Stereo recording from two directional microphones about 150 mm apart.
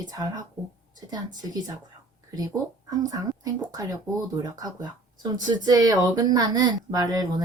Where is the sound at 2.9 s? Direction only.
25° right (ahead or behind).